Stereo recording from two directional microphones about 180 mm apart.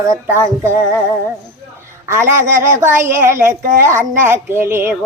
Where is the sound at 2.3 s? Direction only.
15° right (ahead or behind).